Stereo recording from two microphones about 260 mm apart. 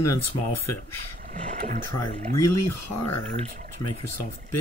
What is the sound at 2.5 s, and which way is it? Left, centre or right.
Speech, left.